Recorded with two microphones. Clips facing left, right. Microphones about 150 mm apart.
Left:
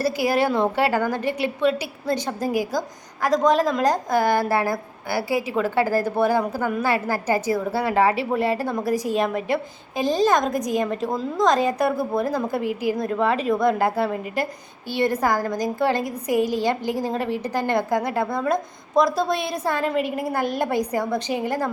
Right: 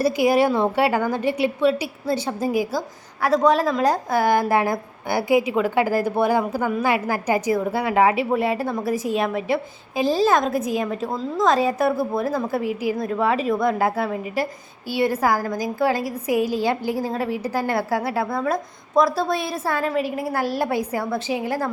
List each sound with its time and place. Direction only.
0.0 s a woman's voice: 15° right (ahead or behind)
8.8 s a woman's voice: 40° left (ahead or behind)
9.1 s a woman's voice: 5° right (ahead or behind)